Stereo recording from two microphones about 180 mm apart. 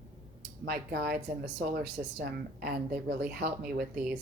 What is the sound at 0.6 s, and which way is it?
Speech, 65° right (ahead or behind).